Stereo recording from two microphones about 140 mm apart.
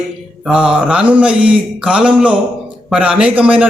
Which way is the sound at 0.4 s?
5° right (ahead or behind).